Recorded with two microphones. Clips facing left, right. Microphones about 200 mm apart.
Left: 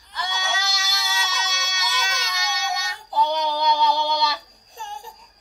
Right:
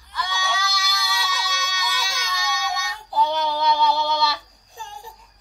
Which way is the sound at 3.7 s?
Centre (ahead or behind).